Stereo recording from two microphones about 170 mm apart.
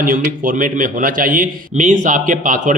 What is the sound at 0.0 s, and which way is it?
A man's voice, 55° right (ahead or behind).